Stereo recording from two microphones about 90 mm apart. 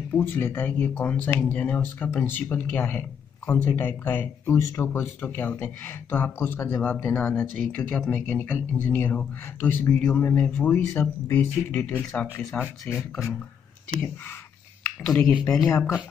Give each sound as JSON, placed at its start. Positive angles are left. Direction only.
{"t": 0.1, "sound": "speech", "side_deg": 25}
{"t": 4.6, "sound": "speech", "side_deg": 35}
{"t": 13.1, "sound": "speech", "side_deg": 0}
{"t": 15.5, "sound": "speech", "side_deg": 40}